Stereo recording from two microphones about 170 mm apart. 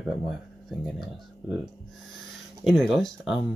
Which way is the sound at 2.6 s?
Centre (ahead or behind).